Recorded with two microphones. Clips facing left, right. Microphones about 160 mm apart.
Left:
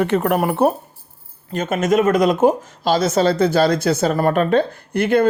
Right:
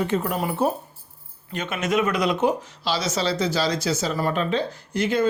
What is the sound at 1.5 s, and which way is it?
Speech, 45° left (ahead or behind).